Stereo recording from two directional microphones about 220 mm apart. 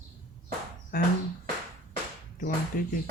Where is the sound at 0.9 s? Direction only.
40° left (ahead or behind).